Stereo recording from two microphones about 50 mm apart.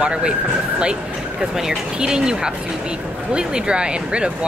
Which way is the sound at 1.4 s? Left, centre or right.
Centre.